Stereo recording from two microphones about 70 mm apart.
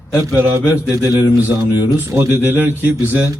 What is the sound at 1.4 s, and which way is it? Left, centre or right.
A man's voice, right.